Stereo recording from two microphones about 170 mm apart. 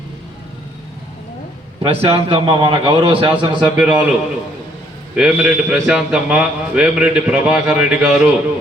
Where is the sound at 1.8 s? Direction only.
35° right (ahead or behind).